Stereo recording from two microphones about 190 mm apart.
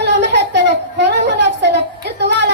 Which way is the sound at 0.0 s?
65° right (ahead or behind).